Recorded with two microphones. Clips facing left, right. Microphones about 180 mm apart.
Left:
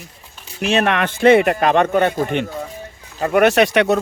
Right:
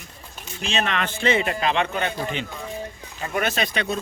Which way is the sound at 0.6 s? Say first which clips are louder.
Left 8 dB; 60° left (ahead or behind).